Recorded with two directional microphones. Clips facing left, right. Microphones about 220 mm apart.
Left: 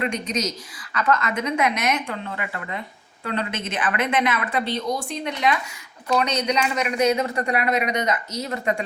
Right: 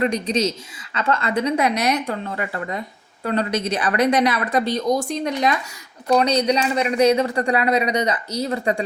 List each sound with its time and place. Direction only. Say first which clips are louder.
0.0 s speech: right 5 dB; 35° right (ahead or behind)